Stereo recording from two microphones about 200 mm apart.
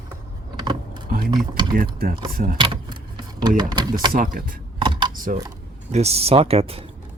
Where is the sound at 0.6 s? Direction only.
20° right (ahead or behind).